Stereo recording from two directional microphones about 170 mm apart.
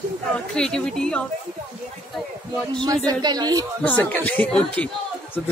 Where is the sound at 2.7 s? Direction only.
25° right (ahead or behind).